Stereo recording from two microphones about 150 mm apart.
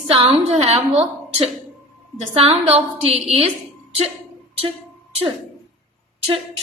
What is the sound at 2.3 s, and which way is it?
A woman's voice, 40° right (ahead or behind).